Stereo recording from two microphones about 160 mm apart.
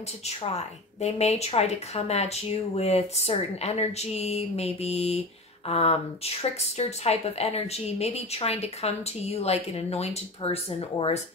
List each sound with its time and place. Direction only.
0.4 s speech: 40° left (ahead or behind)